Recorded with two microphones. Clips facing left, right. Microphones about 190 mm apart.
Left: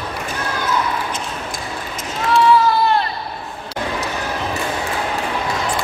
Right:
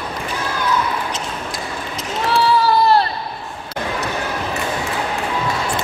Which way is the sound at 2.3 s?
35° right (ahead or behind).